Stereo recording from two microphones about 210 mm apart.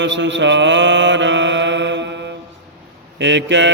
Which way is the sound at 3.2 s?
60° right (ahead or behind).